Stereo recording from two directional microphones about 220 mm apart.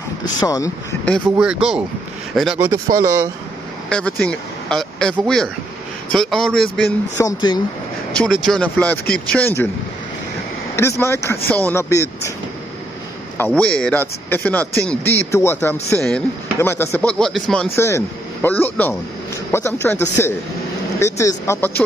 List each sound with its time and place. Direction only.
0.4 s speech: 15° left (ahead or behind)
1.2 s speech: 5° right (ahead or behind)
3.9 s speech: 5° left (ahead or behind)
7.2 s speech: 15° left (ahead or behind)
10.8 s speech: 10° left (ahead or behind)
13.4 s speech: 5° left (ahead or behind)